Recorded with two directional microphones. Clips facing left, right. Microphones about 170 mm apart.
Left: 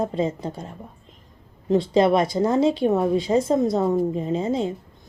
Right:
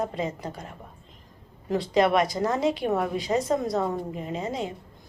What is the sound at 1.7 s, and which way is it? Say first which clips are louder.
A woman's voice: left 4 dB; 25° left (ahead or behind).